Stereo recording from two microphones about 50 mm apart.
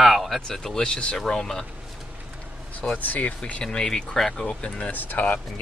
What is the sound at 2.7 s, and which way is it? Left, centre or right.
Speech, left.